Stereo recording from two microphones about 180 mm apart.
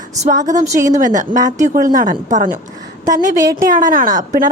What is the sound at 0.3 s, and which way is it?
Speech, 45° right (ahead or behind).